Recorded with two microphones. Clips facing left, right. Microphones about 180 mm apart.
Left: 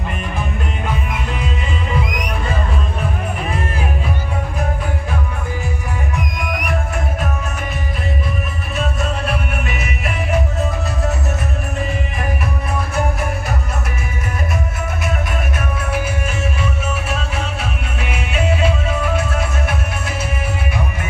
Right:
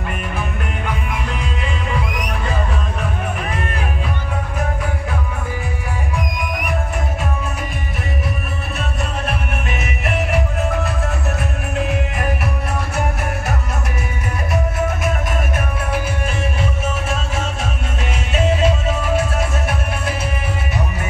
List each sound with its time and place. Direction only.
18.6 s music: 45° right (ahead or behind)